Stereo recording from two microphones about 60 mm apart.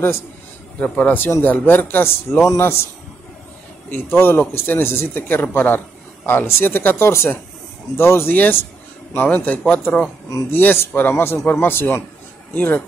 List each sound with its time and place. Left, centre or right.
0.7 s a man's voice: left
3.9 s a man's voice: left
10.5 s speech: left
12.5 s a man's voice: left